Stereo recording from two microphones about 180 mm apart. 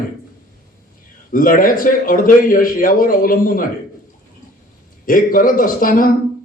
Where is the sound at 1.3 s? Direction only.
50° left (ahead or behind).